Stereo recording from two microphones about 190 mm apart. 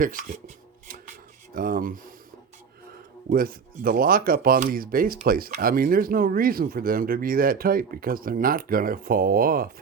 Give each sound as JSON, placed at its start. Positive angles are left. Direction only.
{"t": 0.0, "sound": "a sound", "side_deg": -45}
{"t": 1.5, "sound": "speech", "side_deg": -45}
{"t": 3.3, "sound": "speech", "side_deg": -50}